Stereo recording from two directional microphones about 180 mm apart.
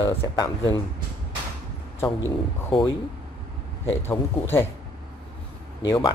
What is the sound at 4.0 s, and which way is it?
Speech, 15° left (ahead or behind).